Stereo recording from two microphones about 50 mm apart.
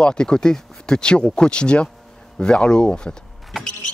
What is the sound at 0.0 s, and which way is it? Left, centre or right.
Speech, centre.